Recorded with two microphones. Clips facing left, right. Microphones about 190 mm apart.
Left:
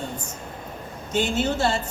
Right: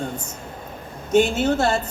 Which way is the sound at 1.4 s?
50° right (ahead or behind).